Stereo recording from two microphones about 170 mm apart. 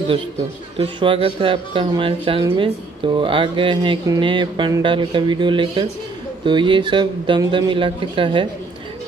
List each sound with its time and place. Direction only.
0.7 s speech: 30° right (ahead or behind)